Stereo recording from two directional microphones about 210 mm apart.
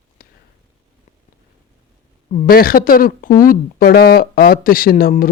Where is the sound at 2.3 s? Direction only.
40° left (ahead or behind).